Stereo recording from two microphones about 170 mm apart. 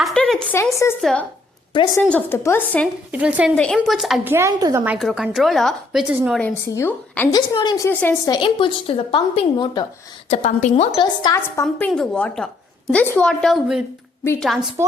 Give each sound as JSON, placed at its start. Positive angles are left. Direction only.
{"t": 0.0, "sound": "a sound", "side_deg": 0}
{"t": 0.5, "sound": "a woman's voice", "side_deg": 15}
{"t": 2.0, "sound": "a woman's voice", "side_deg": 10}
{"t": 3.1, "sound": "a woman's voice", "side_deg": -10}
{"t": 3.5, "sound": "speech", "side_deg": 5}
{"t": 4.3, "sound": "a woman's voice", "side_deg": -15}
{"t": 4.9, "sound": "speech", "side_deg": 0}
{"t": 6.7, "sound": "a woman's voice", "side_deg": 15}
{"t": 7.3, "sound": "speech", "side_deg": 25}
{"t": 7.9, "sound": "a woman's voice", "side_deg": 15}
{"t": 8.4, "sound": "speech", "side_deg": 30}
{"t": 10.2, "sound": "a woman's voice", "side_deg": 40}
{"t": 11.0, "sound": "speech", "side_deg": 25}
{"t": 11.6, "sound": "speech", "side_deg": 5}